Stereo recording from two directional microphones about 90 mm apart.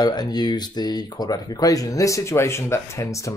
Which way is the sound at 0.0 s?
50° left (ahead or behind).